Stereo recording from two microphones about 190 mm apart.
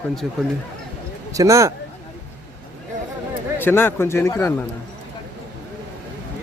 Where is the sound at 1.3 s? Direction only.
15° right (ahead or behind).